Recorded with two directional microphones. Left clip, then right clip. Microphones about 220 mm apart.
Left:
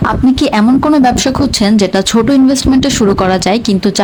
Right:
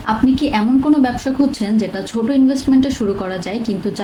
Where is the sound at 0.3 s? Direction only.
50° left (ahead or behind).